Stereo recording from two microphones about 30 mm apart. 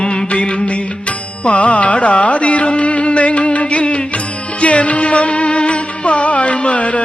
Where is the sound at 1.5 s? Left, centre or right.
Left.